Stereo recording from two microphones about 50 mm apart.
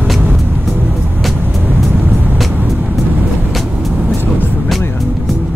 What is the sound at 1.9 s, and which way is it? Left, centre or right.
Vehicle, right.